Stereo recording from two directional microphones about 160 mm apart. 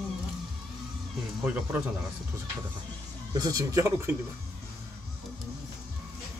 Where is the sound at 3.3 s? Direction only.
25° right (ahead or behind).